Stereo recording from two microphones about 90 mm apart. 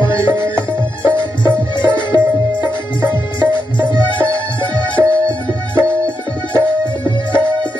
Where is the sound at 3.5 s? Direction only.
60° left (ahead or behind).